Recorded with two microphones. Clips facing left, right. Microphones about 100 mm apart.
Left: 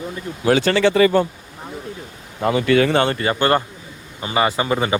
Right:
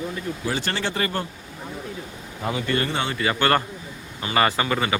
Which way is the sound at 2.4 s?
90° left.